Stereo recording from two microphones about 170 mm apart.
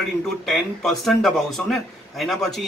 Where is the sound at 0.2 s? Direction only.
Centre (ahead or behind).